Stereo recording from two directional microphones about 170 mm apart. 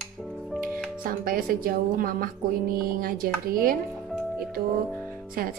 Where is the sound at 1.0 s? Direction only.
55° right (ahead or behind).